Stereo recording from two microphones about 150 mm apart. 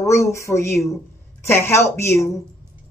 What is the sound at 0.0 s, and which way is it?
Speech, 20° left (ahead or behind).